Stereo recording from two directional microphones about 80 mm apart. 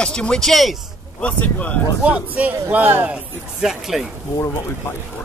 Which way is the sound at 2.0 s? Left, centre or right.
Centre.